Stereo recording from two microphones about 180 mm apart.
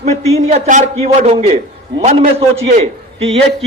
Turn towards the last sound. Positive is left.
turn(degrees=-35)  # may be behind; listen again after turning